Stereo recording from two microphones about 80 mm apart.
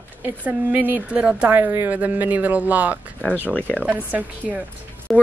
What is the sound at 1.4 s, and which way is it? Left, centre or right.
Speech, right.